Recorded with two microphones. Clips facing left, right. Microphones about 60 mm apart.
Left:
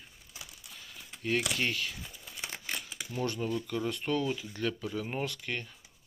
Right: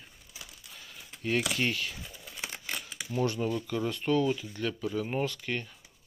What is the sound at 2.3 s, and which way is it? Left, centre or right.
Crumpling, centre.